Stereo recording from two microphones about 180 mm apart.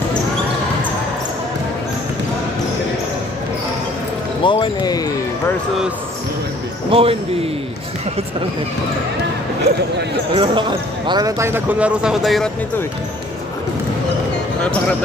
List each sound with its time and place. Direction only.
4.4 s speech: 25° left (ahead or behind)
6.9 s speech: 30° right (ahead or behind)
10.3 s speech: 25° right (ahead or behind); by 12.4 s centre (ahead or behind)
14.6 s speech: 5° left (ahead or behind)